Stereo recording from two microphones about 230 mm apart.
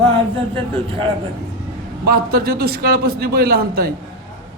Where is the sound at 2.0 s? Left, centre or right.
Right.